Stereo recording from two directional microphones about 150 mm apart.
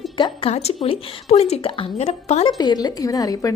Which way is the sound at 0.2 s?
30° left (ahead or behind).